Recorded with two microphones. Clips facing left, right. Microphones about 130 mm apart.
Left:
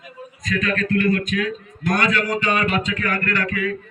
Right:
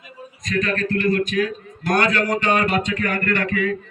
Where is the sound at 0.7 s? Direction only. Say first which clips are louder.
Left 2 dB; 35° right (ahead or behind).